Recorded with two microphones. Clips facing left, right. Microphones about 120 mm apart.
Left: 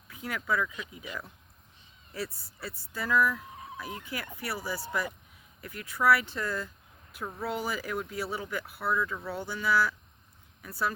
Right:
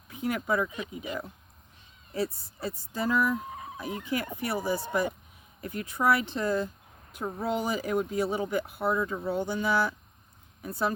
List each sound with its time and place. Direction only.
0.1 s speech: 25° right (ahead or behind)
2.1 s speech: 20° right (ahead or behind)